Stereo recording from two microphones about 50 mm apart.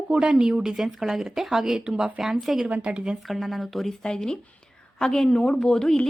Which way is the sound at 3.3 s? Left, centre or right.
Centre.